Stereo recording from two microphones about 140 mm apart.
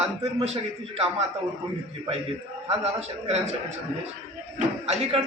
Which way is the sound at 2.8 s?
50° right (ahead or behind).